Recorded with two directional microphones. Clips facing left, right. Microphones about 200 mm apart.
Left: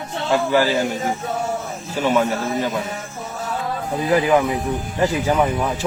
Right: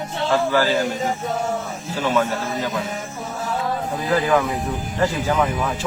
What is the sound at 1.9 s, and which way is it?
Speech, 15° left (ahead or behind).